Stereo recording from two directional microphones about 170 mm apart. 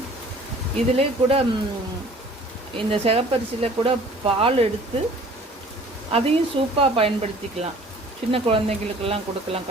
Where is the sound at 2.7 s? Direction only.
35° right (ahead or behind).